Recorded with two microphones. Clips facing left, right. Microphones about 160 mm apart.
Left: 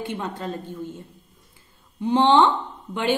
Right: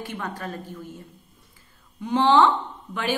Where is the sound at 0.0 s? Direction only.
25° left (ahead or behind).